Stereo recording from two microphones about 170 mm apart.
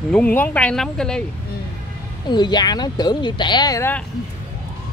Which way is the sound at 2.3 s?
25° left (ahead or behind).